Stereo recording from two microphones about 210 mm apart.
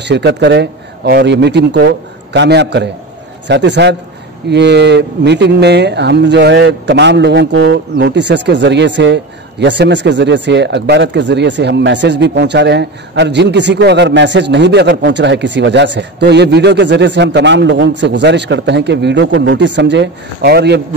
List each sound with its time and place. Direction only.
0.0 s speech: 55° right (ahead or behind)